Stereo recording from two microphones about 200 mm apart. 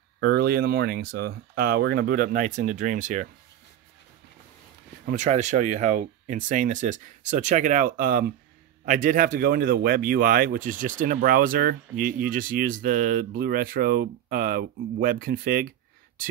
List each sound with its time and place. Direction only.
0.2 s speech: 50° right (ahead or behind)
5.0 s speech: 40° right (ahead or behind)